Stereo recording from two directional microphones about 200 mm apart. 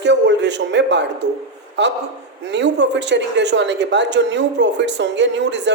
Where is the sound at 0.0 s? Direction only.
60° right (ahead or behind).